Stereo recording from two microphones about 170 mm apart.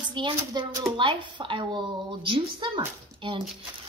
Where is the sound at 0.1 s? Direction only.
30° right (ahead or behind).